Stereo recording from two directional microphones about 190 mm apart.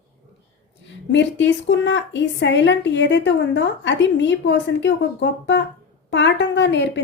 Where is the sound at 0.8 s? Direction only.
70° left (ahead or behind).